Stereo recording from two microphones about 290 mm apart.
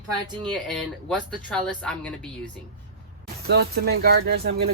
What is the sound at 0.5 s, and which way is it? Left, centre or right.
Speech, centre.